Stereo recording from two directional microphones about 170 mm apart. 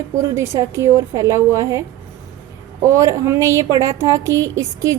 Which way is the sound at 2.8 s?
20° right (ahead or behind).